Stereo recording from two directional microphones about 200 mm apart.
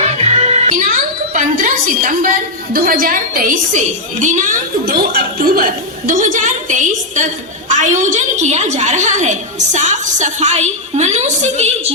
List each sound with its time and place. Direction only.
0.0 s music: 35° right (ahead or behind)
1.3 s a woman's voice: 40° right (ahead or behind)